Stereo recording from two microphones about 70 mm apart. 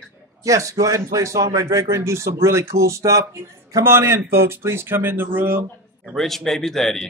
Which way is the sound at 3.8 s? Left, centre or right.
Right.